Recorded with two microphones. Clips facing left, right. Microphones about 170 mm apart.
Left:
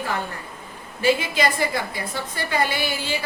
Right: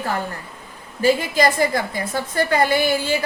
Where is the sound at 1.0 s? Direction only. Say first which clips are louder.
Right 3 dB; 45° right (ahead or behind).